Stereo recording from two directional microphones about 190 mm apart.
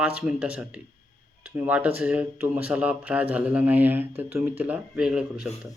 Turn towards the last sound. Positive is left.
turn(degrees=-5)  # may be behind; listen again after turning